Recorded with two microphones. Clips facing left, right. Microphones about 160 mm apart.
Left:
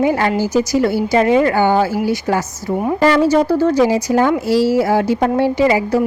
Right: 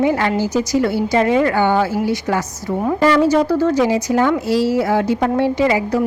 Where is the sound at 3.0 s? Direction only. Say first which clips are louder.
Left 1 dB; 30° left (ahead or behind).